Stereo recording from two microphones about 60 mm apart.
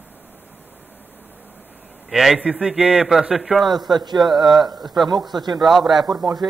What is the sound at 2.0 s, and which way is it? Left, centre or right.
Speech, centre.